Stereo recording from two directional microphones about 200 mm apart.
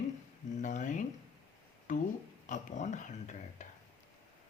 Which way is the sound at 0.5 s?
40° left (ahead or behind).